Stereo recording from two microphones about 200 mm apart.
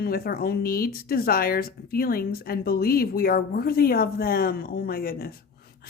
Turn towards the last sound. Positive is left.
turn(degrees=50)  # may be behind; listen again after turning